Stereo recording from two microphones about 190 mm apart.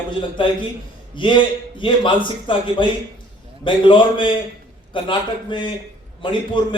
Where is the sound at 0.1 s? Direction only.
25° left (ahead or behind).